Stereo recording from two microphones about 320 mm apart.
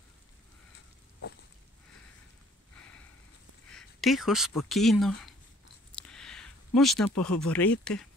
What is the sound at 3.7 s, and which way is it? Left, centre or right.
Speech, centre.